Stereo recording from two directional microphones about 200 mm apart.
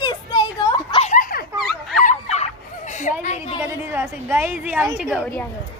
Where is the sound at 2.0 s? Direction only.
35° left (ahead or behind).